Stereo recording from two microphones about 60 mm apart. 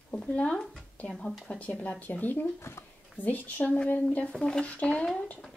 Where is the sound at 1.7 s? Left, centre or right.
Left.